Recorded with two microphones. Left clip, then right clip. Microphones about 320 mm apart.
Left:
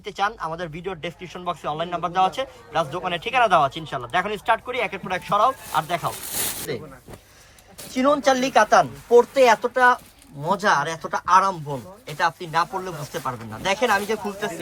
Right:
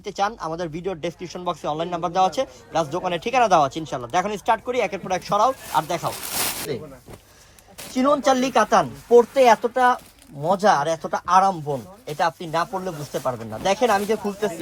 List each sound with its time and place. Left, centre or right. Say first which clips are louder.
0.0 s speech: even; centre
7.9 s speech: even; right